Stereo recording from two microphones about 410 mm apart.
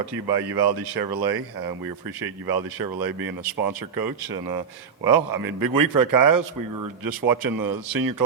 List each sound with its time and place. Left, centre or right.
0.0 s speech: right
2.5 s a man's voice: right